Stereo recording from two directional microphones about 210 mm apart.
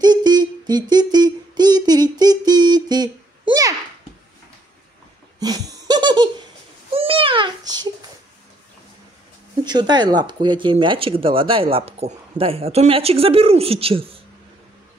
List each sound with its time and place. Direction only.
0.0 s humming: 20° right (ahead or behind)
5.4 s laughter: 20° right (ahead or behind)
6.9 s babbling: 25° right (ahead or behind)
9.7 s speech: 20° right (ahead or behind)